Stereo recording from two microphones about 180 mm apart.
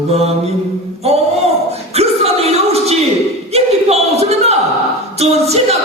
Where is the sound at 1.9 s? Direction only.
35° right (ahead or behind).